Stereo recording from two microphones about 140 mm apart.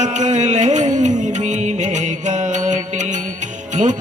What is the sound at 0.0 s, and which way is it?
Music, 55° right (ahead or behind).